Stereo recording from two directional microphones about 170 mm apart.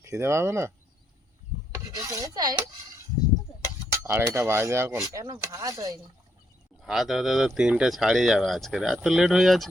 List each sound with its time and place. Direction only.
0.0 s speech: 15° right (ahead or behind)
1.7 s rub: 15° right (ahead or behind)
4.0 s speech: 15° right (ahead or behind)
6.8 s speech: centre (ahead or behind)